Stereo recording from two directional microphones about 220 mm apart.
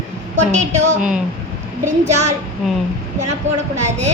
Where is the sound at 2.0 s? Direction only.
30° right (ahead or behind).